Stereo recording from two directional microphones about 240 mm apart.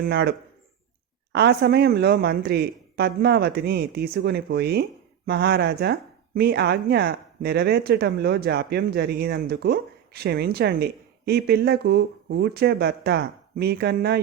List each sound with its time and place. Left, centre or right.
0.0 s speech: right